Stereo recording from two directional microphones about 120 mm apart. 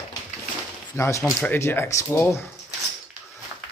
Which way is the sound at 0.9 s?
25° left (ahead or behind).